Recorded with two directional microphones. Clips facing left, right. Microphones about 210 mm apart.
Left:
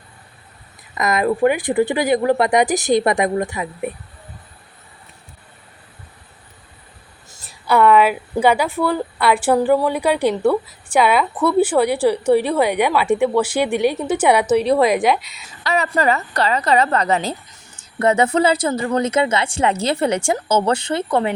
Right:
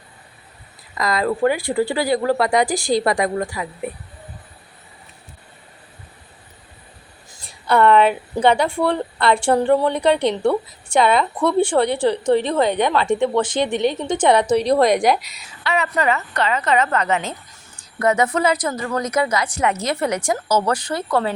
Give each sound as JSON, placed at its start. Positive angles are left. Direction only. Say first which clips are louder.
{"t": 0.9, "sound": "speech", "louder": "left 2 dB", "side_deg": 20}
{"t": 7.3, "sound": "a woman's voice", "louder": "left 1 dB", "side_deg": 5}
{"t": 15.4, "sound": "a woman's voice", "louder": "left 1 dB", "side_deg": 40}